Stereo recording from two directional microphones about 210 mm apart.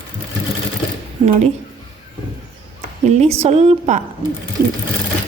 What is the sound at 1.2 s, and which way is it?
Speech, 35° right (ahead or behind).